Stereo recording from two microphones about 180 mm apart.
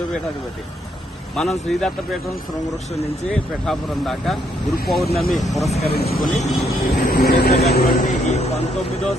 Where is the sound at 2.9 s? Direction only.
35° left (ahead or behind).